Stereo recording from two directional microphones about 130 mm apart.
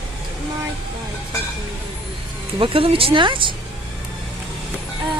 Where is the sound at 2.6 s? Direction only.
45° right (ahead or behind).